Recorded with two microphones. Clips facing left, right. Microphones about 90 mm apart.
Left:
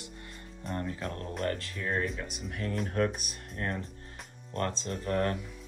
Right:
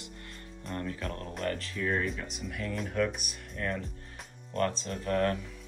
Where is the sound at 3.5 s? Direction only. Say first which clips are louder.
Right 1 dB; 35° left (ahead or behind).